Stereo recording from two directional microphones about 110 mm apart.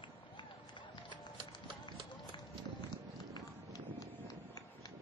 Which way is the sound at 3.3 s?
30° right (ahead or behind).